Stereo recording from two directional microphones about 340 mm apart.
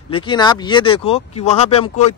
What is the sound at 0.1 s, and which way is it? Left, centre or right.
Speech, centre.